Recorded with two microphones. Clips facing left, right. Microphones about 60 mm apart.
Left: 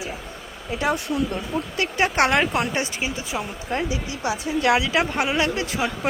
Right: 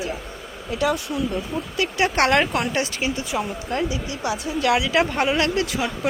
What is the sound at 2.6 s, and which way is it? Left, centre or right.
Speech, left.